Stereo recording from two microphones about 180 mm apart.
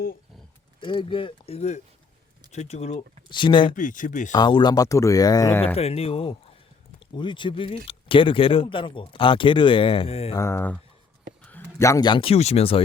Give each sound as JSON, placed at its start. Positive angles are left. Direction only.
{"t": 0.8, "sound": "speech", "side_deg": 30}
{"t": 3.2, "sound": "speech", "side_deg": 25}
{"t": 3.8, "sound": "speech", "side_deg": 45}
{"t": 4.3, "sound": "speech", "side_deg": 25}
{"t": 5.7, "sound": "speech", "side_deg": 35}
{"t": 10.3, "sound": "speech", "side_deg": 15}